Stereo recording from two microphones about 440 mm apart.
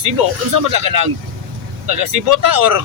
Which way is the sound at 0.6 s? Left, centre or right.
Right.